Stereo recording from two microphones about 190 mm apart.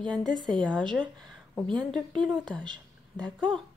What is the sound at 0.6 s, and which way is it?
A woman's voice, 5° left (ahead or behind).